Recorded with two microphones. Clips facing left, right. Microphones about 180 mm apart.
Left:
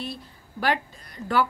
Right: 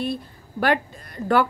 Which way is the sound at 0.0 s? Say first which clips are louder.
Right 8 dB; 55° right (ahead or behind).